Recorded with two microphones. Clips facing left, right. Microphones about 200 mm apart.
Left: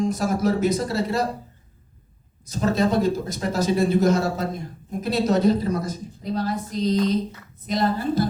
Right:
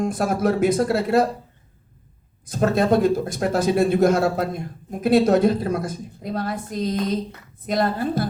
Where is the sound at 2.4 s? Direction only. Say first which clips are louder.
Right 3 dB; 55° right (ahead or behind).